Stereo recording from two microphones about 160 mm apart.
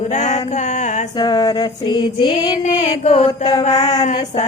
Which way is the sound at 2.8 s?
45° left (ahead or behind).